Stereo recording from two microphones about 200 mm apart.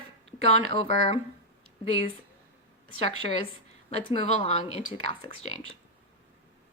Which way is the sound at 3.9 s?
30° left (ahead or behind).